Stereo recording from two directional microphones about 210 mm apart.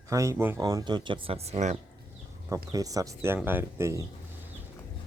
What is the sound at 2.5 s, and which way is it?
Speech, 15° right (ahead or behind).